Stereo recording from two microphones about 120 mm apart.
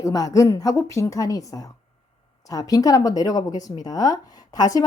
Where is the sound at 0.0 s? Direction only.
30° left (ahead or behind).